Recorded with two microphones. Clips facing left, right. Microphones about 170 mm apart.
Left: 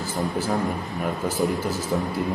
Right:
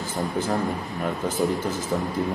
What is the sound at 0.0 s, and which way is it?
A man's voice, 10° left (ahead or behind).